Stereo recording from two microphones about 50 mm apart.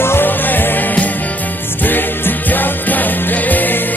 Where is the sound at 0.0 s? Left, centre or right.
Left.